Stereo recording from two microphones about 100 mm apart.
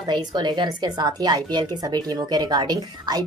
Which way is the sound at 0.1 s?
45° right (ahead or behind).